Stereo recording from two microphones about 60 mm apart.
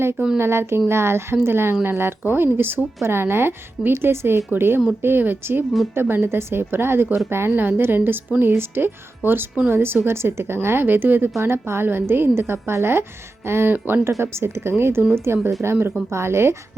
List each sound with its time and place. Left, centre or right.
0.3 s a woman's voice: right
13.7 s speech: right
14.0 s a woman's voice: right